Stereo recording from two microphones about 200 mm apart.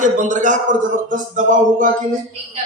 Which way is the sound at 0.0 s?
40° right (ahead or behind).